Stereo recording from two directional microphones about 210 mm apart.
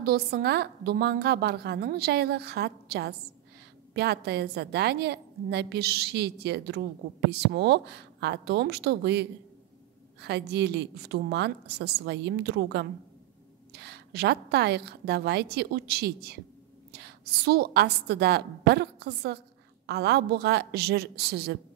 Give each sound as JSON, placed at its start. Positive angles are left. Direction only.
{"t": 0.0, "sound": "a woman's voice", "side_deg": -50}